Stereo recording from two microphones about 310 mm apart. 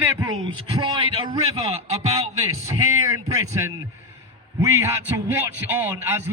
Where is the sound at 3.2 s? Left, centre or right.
Centre.